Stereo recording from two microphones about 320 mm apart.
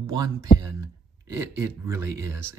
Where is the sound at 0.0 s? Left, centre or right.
Centre.